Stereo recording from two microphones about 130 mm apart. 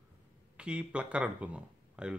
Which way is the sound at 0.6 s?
10° right (ahead or behind).